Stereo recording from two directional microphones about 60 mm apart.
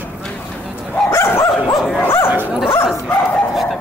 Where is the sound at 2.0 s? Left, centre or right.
Left.